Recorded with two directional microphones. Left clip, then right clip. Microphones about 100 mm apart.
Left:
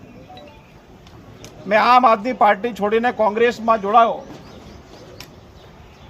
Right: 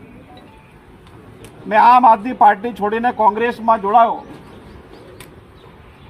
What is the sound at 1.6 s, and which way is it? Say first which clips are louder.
A man's voice: right 3 dB; 40° left (ahead or behind).